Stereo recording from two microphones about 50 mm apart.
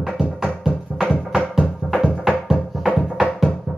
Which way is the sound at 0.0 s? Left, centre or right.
Centre.